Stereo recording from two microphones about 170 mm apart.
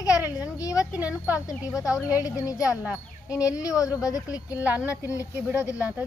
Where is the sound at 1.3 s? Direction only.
20° left (ahead or behind).